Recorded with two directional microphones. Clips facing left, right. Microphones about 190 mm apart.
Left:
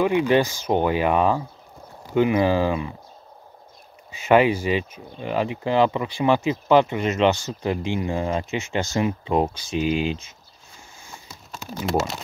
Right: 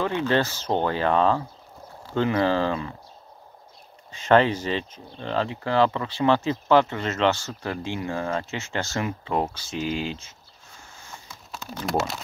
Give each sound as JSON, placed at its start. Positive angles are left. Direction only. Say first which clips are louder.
{"t": 0.0, "sound": "speech", "louder": "left 5 dB", "side_deg": 15}
{"t": 4.1, "sound": "speech", "louder": "left 2 dB", "side_deg": 10}
{"t": 11.8, "sound": "speech", "louder": "left 2 dB", "side_deg": 0}